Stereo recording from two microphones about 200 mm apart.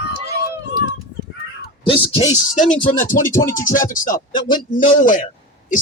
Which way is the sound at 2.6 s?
40° left (ahead or behind).